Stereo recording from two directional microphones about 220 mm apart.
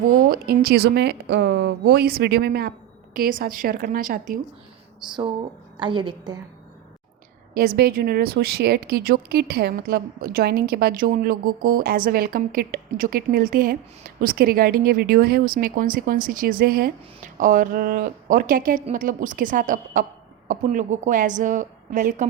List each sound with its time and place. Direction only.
0.0 s speech: 40° right (ahead or behind)
5.8 s a woman's voice: 20° right (ahead or behind)
7.8 s speech: 45° right (ahead or behind)